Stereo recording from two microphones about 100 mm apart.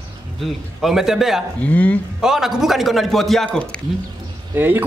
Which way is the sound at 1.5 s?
15° left (ahead or behind).